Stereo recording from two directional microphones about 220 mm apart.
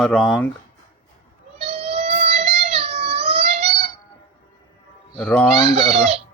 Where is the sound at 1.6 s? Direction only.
25° right (ahead or behind).